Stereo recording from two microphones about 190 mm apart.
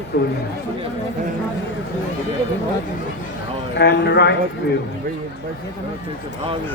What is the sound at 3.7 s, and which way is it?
Speech, 65° left (ahead or behind).